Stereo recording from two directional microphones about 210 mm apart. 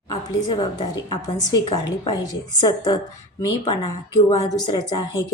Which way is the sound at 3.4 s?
20° left (ahead or behind).